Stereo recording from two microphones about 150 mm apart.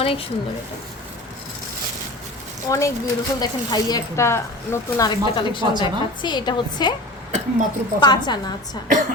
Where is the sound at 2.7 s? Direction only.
20° left (ahead or behind).